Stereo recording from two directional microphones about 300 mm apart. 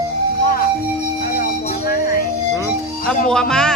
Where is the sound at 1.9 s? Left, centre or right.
Left.